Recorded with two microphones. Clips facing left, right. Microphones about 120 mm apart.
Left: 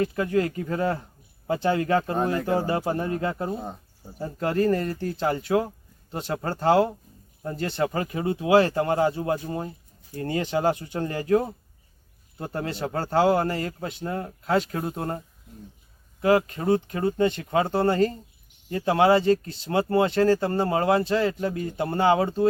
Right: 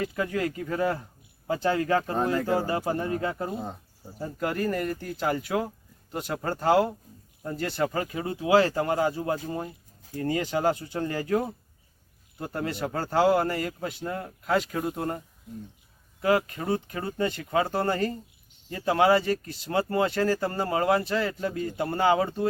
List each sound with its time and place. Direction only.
0.0 s speech: 25° left (ahead or behind)
16.5 s speech: 25° left (ahead or behind)